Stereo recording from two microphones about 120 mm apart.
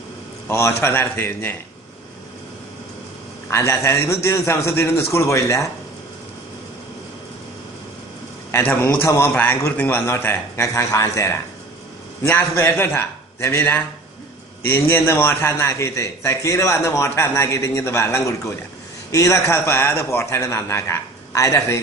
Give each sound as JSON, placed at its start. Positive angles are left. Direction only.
{"t": 0.4, "sound": "a man's voice", "side_deg": 20}
{"t": 3.5, "sound": "a man's voice", "side_deg": 20}
{"t": 8.5, "sound": "a man's voice", "side_deg": 15}